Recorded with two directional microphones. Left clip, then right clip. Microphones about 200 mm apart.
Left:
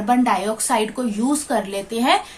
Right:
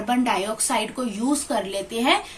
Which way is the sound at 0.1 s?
30° left (ahead or behind).